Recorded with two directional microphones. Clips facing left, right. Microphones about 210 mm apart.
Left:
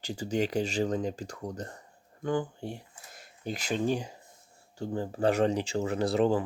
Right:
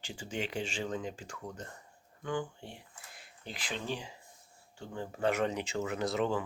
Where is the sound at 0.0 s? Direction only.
40° left (ahead or behind).